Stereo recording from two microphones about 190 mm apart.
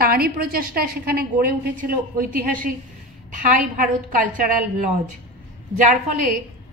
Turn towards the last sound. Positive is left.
turn(degrees=-45)  # may be behind; listen again after turning